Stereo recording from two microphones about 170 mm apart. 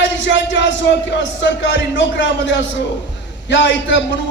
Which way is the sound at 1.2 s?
90° left.